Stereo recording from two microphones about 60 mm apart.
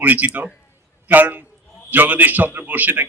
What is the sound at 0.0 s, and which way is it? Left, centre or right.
A man's voice, right.